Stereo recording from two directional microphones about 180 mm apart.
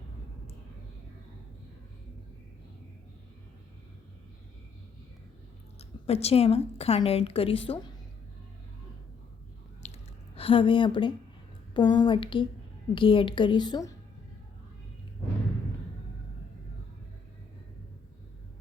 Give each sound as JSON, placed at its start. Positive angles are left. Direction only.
{"t": 5.8, "sound": "a woman's voice", "side_deg": 35}
{"t": 9.8, "sound": "squish", "side_deg": 35}
{"t": 11.7, "sound": "a woman's voice", "side_deg": 25}